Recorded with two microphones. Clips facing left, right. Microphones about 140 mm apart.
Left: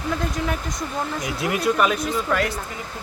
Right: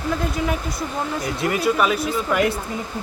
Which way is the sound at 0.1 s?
5° right (ahead or behind).